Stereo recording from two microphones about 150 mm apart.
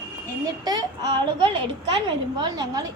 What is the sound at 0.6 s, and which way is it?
A woman's voice, 25° right (ahead or behind).